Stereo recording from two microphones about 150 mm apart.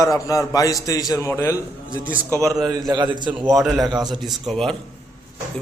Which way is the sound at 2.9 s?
30° right (ahead or behind).